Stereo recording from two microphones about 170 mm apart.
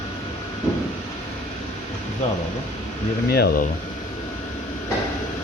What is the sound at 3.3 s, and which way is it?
Speech, 65° left (ahead or behind).